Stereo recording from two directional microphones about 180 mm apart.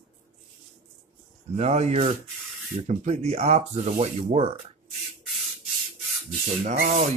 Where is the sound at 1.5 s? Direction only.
35° right (ahead or behind).